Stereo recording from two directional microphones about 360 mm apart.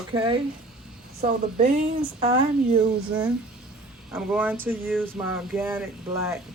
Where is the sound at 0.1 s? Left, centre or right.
Centre.